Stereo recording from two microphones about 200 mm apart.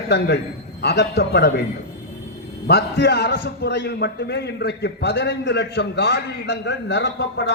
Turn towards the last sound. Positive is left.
turn(degrees=60)  # may be behind; listen again after turning